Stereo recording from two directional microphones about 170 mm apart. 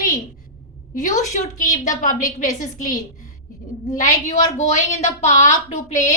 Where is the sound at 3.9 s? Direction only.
45° left (ahead or behind).